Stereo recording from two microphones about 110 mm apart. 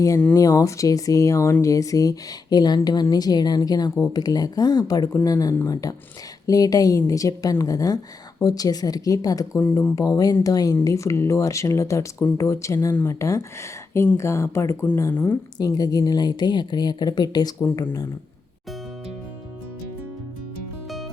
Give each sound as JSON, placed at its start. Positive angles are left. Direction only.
{"t": 0.3, "sound": "a woman's voice", "side_deg": 30}
{"t": 9.6, "sound": "speech", "side_deg": 20}
{"t": 10.0, "sound": "a woman's voice", "side_deg": 35}
{"t": 15.5, "sound": "a woman's voice", "side_deg": 35}